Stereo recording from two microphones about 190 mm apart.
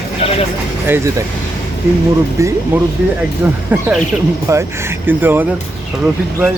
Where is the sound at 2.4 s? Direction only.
15° right (ahead or behind).